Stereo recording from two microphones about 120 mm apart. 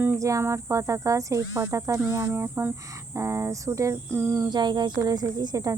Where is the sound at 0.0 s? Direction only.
25° right (ahead or behind).